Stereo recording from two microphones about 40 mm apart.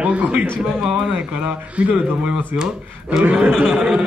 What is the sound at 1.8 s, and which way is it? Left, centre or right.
A man's voice, right.